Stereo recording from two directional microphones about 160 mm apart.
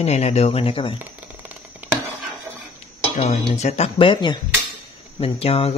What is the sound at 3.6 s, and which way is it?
Speech, 40° left (ahead or behind).